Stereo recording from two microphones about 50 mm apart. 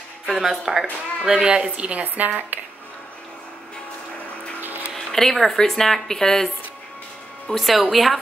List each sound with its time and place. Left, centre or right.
0.3 s speech: centre; by 2.6 s right
4.6 s music: right
4.9 s speech: centre
7.5 s a woman's voice: centre